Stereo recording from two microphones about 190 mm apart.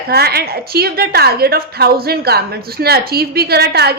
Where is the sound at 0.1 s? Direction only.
55° right (ahead or behind).